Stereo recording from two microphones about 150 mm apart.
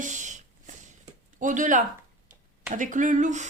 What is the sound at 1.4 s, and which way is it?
Speech, 60° right (ahead or behind).